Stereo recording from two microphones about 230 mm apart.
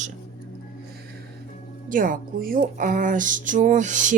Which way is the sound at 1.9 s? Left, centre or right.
Right.